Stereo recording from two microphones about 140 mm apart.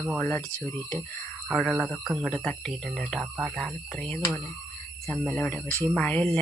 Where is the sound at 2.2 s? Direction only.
10° left (ahead or behind).